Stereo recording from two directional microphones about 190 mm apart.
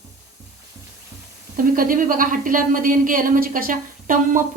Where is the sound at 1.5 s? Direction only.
45° right (ahead or behind).